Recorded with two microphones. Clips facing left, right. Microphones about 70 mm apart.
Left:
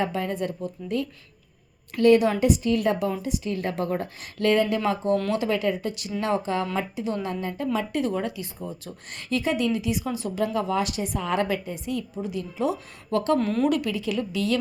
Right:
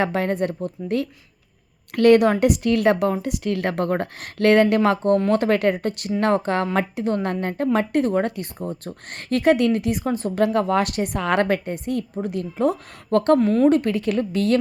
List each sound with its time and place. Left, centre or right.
0.0 s a woman's voice: right
10.4 s a woman's voice: right
13.4 s a woman's voice: centre
13.7 s a woman's voice: right
13.9 s a woman's voice: right